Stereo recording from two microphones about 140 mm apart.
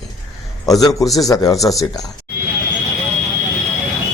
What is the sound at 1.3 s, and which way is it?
Speech, 25° left (ahead or behind).